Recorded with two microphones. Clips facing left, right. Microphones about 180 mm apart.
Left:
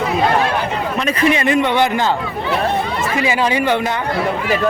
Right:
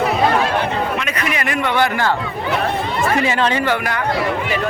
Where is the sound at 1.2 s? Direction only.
25° left (ahead or behind).